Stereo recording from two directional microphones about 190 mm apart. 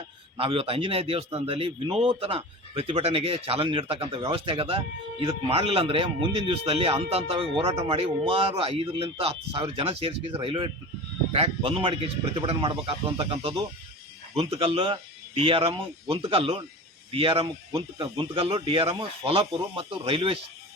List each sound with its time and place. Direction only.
0.3 s a man's voice: 30° right (ahead or behind)